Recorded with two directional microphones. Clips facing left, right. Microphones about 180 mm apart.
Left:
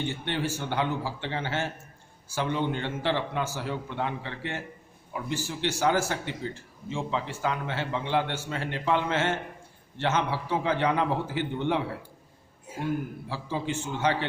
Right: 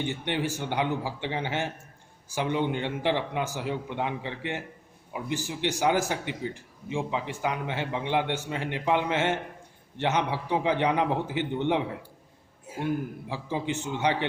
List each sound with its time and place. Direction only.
0.0 s a man's voice: 15° right (ahead or behind)